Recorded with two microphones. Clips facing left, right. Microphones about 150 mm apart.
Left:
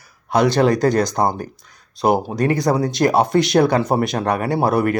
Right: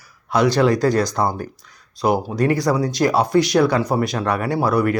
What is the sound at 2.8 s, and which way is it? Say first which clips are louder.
Speech: left 1 dB; 50° left (ahead or behind).